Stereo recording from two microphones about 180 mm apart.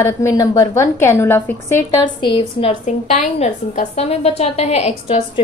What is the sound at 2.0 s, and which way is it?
Speech, 25° left (ahead or behind).